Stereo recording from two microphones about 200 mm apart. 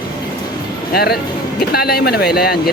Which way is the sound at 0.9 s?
50° left (ahead or behind).